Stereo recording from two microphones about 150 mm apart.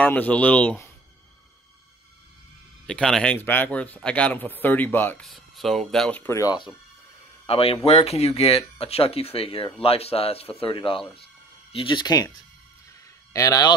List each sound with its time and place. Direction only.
0.0 s speech: 10° left (ahead or behind)
2.9 s speech: 5° left (ahead or behind)
5.2 s speech: centre (ahead or behind); by 6.7 s 25° left (ahead or behind)
7.4 s speech: 40° left (ahead or behind)
13.3 s speech: 20° left (ahead or behind)